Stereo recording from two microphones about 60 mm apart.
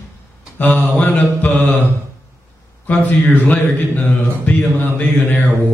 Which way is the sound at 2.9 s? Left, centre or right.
Left.